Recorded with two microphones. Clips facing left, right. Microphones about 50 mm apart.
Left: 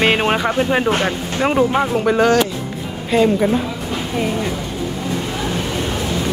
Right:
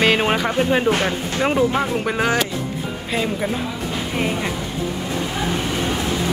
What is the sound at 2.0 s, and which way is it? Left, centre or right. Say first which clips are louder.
Speech: left 6 dB; centre.